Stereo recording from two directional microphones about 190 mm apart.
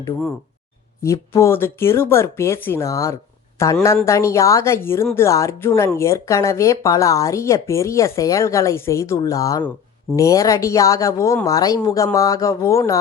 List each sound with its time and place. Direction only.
1.0 s speech: 15° left (ahead or behind)